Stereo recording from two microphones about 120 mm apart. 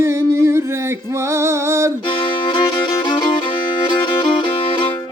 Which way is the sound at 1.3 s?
20° right (ahead or behind).